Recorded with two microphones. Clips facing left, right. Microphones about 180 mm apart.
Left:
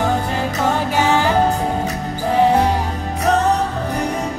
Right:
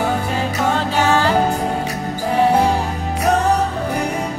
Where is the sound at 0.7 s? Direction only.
15° left (ahead or behind).